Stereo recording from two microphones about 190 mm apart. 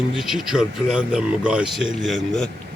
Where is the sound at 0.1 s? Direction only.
Centre (ahead or behind).